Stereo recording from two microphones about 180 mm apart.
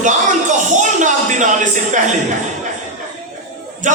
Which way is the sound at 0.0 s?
45° right (ahead or behind).